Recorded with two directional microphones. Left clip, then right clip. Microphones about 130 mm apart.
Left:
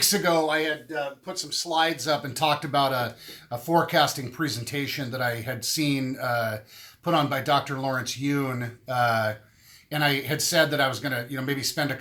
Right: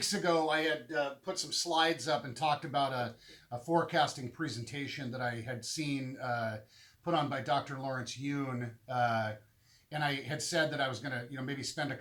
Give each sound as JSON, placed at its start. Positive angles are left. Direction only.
{"t": 0.0, "sound": "speech", "side_deg": 30}